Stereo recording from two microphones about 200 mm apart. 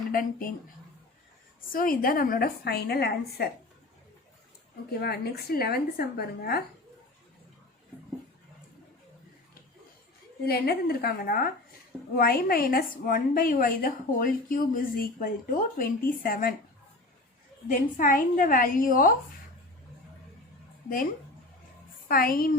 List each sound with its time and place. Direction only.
0.1 s a woman's voice: 45° left (ahead or behind)
1.7 s a woman's voice: 45° left (ahead or behind)
4.9 s a woman's voice: 50° left (ahead or behind)
10.4 s a woman's voice: 50° left (ahead or behind)
17.7 s a woman's voice: 40° left (ahead or behind)
22.1 s a woman's voice: 45° left (ahead or behind)